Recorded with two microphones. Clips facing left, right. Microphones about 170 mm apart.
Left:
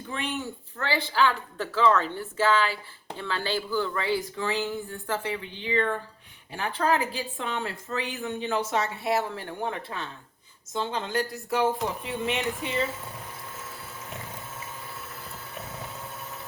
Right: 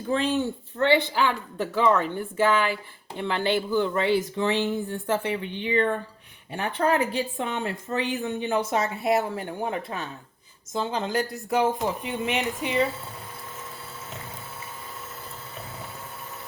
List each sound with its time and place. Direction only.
0.1 s speech: 35° right (ahead or behind)
0.8 s speech: 20° right (ahead or behind)